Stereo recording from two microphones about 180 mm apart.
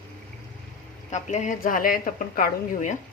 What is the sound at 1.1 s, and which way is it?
Speech, 40° left (ahead or behind).